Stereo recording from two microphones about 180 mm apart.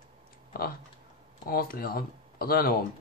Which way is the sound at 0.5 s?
55° left (ahead or behind).